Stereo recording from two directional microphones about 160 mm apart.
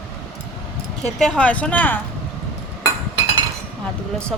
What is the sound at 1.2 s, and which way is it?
Speech, 5° left (ahead or behind).